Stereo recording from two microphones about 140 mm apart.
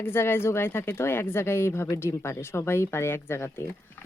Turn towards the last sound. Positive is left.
turn(degrees=15)  # may be behind; listen again after turning